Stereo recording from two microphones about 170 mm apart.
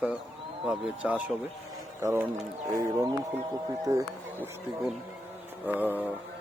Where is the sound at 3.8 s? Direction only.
20° right (ahead or behind).